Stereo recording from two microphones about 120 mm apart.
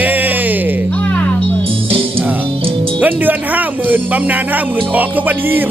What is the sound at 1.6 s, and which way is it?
Music, 50° right (ahead or behind).